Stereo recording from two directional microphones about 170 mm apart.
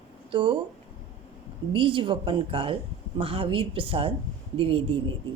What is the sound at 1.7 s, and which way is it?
Speech, 30° right (ahead or behind).